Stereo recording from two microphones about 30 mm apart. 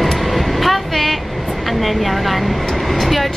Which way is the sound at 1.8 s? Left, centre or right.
Centre.